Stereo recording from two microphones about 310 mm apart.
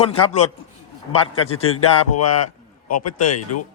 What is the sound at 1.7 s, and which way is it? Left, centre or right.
Speech, left.